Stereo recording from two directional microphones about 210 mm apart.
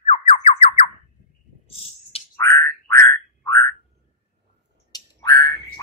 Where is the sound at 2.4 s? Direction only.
15° left (ahead or behind).